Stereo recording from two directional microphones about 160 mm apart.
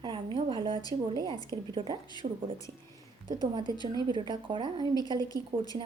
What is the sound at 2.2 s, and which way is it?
Speech, 55° right (ahead or behind).